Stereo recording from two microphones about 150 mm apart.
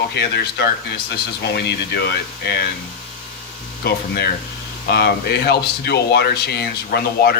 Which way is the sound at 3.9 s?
90° left.